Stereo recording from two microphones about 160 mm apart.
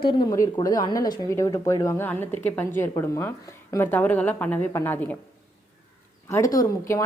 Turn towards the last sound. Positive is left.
turn(degrees=20)  # may be behind; listen again after turning